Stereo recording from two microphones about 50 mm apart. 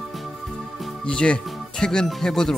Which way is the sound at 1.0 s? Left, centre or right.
Left.